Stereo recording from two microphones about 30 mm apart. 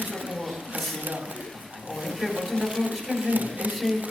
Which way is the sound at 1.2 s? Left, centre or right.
Right.